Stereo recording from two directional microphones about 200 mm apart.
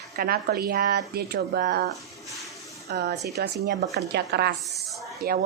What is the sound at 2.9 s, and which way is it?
A woman's voice, 60° right (ahead or behind).